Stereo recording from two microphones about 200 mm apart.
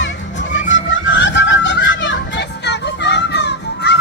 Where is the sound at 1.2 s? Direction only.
65° left (ahead or behind).